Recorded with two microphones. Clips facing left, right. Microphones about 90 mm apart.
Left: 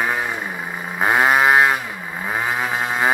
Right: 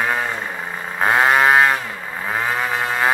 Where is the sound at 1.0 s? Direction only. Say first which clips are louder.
Right 1 dB; 10° left (ahead or behind).